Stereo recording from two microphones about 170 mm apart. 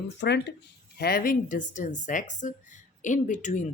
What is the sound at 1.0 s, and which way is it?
Speech, 65° left (ahead or behind).